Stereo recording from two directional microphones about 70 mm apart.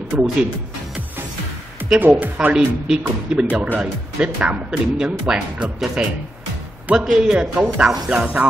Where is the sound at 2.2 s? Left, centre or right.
Right.